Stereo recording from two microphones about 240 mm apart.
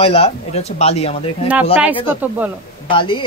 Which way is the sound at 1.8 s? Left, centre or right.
Centre.